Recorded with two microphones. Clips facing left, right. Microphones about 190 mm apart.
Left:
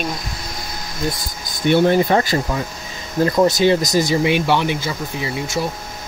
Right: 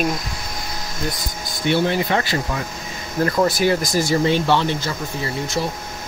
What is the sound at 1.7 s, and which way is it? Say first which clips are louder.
Speech: left 5 dB; 45° left (ahead or behind).